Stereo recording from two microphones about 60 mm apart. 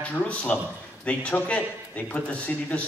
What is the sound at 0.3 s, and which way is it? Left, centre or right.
A man's voice, left.